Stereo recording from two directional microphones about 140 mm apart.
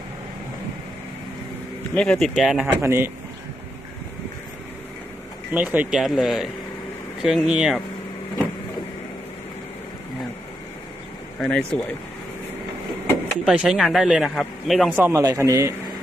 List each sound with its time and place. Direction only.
2.0 s speech: 5° left (ahead or behind)
2.8 s speech: 20° right (ahead or behind)
5.5 s speech: 10° right (ahead or behind)
11.3 s speech: 5° left (ahead or behind)
13.3 s speech: 5° right (ahead or behind)
14.9 s speech: 15° right (ahead or behind)